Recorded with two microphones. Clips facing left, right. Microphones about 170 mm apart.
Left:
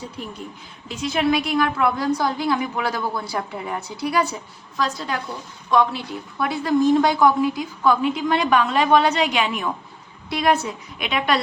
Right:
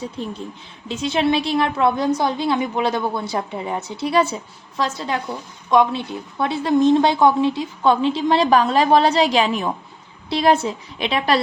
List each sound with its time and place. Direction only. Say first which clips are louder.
0.9 s a woman's voice: right 2 dB; 25° right (ahead or behind)